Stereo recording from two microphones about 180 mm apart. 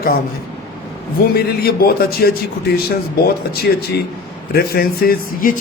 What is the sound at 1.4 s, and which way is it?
Speech, 60° left (ahead or behind).